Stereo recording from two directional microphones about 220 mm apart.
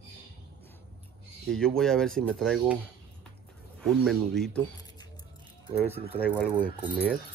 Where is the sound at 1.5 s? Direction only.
Centre (ahead or behind).